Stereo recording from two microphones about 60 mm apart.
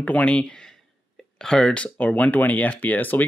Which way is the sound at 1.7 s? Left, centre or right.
Left.